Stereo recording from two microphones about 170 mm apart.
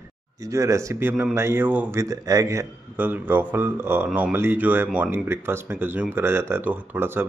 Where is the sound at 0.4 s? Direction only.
20° right (ahead or behind).